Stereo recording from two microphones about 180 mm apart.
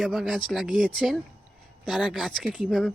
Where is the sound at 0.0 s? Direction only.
Centre (ahead or behind).